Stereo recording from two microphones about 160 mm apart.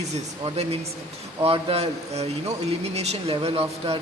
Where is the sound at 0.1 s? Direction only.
40° right (ahead or behind).